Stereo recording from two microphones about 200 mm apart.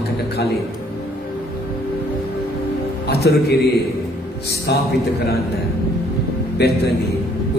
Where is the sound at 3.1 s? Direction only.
55° left (ahead or behind).